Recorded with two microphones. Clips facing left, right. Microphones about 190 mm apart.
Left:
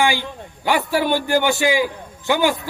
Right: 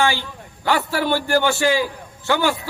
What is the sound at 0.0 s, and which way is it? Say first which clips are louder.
A man's voice: left 1 dB; 15° left (ahead or behind).